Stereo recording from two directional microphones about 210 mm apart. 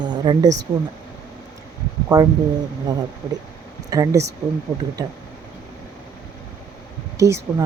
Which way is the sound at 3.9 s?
15° right (ahead or behind).